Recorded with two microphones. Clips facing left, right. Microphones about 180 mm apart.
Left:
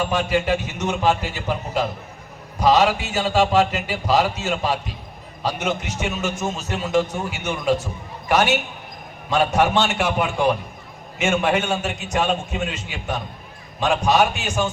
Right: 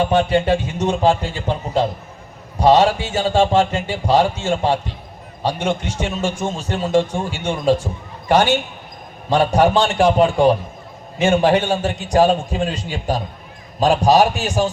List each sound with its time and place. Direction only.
0.0 s a man's voice: 30° right (ahead or behind)